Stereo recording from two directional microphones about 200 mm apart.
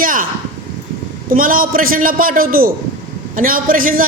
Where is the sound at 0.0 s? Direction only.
45° right (ahead or behind).